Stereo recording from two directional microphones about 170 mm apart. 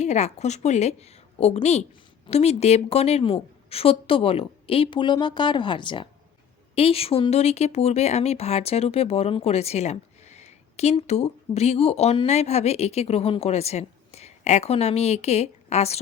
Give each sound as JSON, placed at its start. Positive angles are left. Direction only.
{"t": 0.0, "sound": "speech", "side_deg": 40}